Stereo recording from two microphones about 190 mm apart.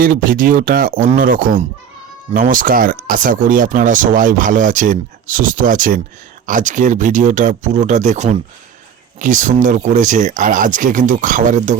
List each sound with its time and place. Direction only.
0.0 s speech: 50° right (ahead or behind)